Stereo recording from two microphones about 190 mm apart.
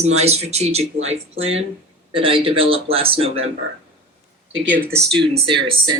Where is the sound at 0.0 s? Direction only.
35° right (ahead or behind).